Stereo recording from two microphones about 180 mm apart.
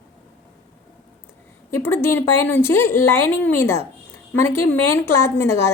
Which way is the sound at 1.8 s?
15° left (ahead or behind).